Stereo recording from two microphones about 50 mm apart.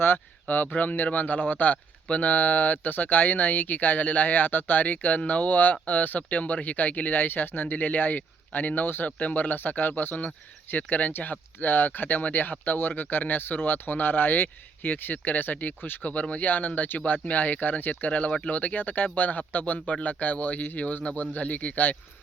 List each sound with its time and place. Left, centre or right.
0.4 s speech: left